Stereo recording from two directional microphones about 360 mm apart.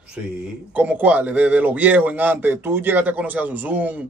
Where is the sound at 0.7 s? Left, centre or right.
Centre.